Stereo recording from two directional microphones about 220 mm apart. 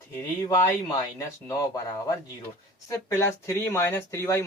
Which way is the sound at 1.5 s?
15° left (ahead or behind).